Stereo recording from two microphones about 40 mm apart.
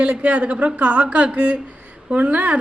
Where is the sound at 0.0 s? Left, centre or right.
Right.